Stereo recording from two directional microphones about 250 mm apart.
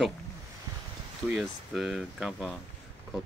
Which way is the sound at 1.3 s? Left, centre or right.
Centre.